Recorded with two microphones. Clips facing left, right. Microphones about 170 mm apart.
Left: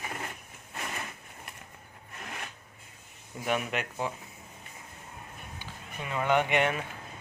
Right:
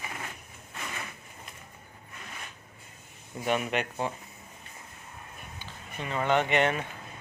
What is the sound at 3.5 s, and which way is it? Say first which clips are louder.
Speech: right 2 dB; centre (ahead or behind).